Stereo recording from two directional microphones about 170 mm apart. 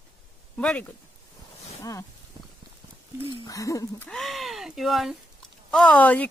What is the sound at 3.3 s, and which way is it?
Speech, 20° left (ahead or behind).